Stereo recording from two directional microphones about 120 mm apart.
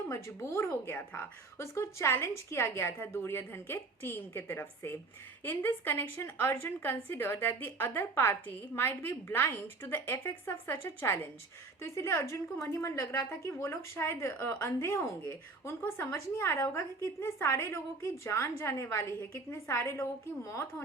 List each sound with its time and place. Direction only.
0.1 s a woman's voice: 25° left (ahead or behind)